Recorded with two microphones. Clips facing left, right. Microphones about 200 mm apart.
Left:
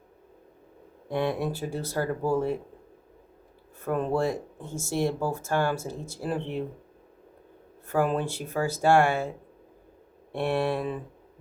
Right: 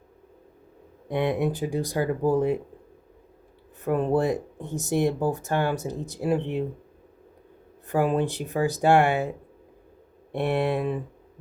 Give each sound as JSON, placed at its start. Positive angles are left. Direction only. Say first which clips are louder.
{"t": 1.0, "sound": "speech", "louder": "right 3 dB", "side_deg": -20}
{"t": 3.8, "sound": "speech", "louder": "right 3 dB", "side_deg": -15}
{"t": 7.9, "sound": "speech", "louder": "right 2 dB", "side_deg": -15}
{"t": 10.3, "sound": "speech", "louder": "right 2 dB", "side_deg": -20}